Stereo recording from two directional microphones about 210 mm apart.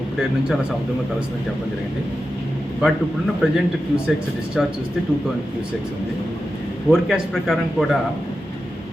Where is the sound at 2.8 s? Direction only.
5° right (ahead or behind).